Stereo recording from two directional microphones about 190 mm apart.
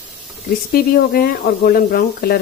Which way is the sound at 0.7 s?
50° left (ahead or behind).